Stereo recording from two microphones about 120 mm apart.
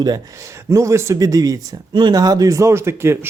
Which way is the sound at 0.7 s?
25° right (ahead or behind).